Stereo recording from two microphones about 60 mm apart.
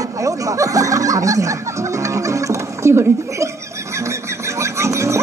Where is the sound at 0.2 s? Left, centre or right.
Right.